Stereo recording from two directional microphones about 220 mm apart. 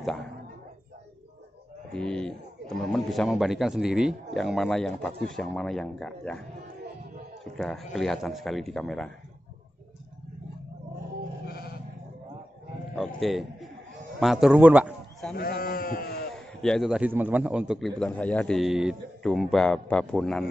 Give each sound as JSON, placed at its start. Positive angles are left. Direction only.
{"t": 0.0, "sound": "speech", "side_deg": 0}
{"t": 1.9, "sound": "speech", "side_deg": 5}
{"t": 7.5, "sound": "speech", "side_deg": 0}
{"t": 11.4, "sound": "sheep", "side_deg": 45}
{"t": 12.9, "sound": "a man's voice", "side_deg": 0}
{"t": 15.3, "sound": "speech", "side_deg": 40}
{"t": 16.3, "sound": "speech", "side_deg": 0}